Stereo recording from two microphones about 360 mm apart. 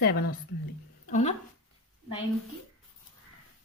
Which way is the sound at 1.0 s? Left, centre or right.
Centre.